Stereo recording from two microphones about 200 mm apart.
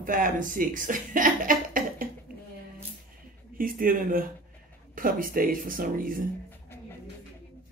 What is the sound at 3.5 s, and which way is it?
Speech, 45° right (ahead or behind).